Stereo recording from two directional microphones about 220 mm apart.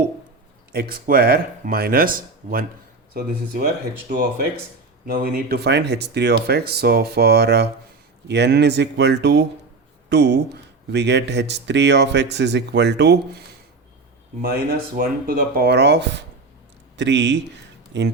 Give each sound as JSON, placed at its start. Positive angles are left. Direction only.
{"t": 0.7, "sound": "speech", "side_deg": -45}
{"t": 4.1, "sound": "speech", "side_deg": -40}
{"t": 14.5, "sound": "speech", "side_deg": -45}